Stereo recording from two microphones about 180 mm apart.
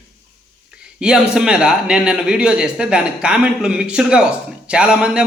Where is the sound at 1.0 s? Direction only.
5° right (ahead or behind).